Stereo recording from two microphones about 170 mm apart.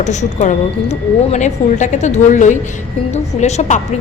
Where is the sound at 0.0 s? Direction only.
45° left (ahead or behind).